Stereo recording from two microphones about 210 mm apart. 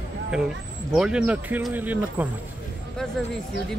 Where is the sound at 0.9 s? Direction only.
5° right (ahead or behind).